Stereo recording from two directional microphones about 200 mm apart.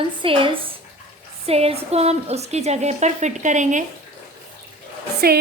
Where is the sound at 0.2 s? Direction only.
25° right (ahead or behind).